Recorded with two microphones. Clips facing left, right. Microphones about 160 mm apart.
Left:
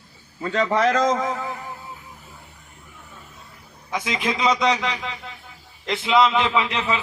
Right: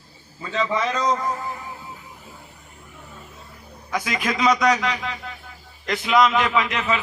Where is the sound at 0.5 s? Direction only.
55° left (ahead or behind); by 1.4 s 90° left.